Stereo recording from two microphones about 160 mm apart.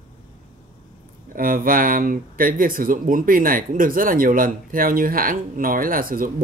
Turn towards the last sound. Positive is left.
turn(degrees=-60)  # may be behind; listen again after turning